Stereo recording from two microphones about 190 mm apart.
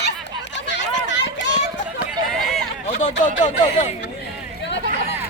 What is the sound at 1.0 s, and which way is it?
Run, 70° left (ahead or behind).